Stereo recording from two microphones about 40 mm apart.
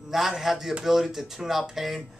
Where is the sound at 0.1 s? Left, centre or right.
Centre.